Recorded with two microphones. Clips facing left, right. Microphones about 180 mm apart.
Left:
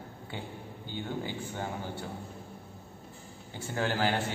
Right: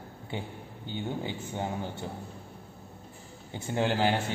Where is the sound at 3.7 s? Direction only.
20° right (ahead or behind).